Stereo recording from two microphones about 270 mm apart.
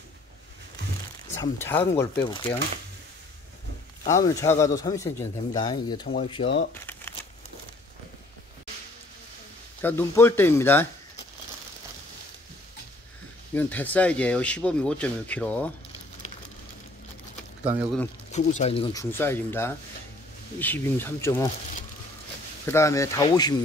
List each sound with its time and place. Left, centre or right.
1.3 s speech: centre
4.1 s speech: centre
6.7 s crumpling: centre
9.8 s speech: centre
13.6 s speech: centre
17.6 s speech: centre
18.6 s speech: left
22.7 s speech: centre